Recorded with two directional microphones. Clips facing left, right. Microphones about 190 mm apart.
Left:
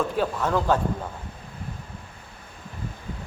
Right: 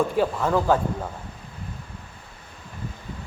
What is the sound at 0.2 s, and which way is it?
Speech, 5° right (ahead or behind).